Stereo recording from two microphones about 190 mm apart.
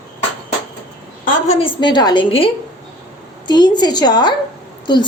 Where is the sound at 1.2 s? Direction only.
45° left (ahead or behind).